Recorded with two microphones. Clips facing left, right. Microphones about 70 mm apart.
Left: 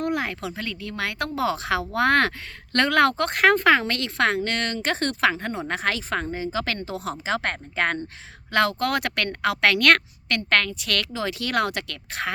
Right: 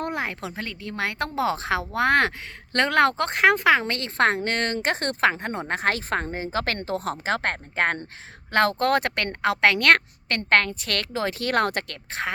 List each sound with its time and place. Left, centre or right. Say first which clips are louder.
0.0 s a woman's voice: left 2 dB; right
3.8 s a woman's voice: right 1 dB; right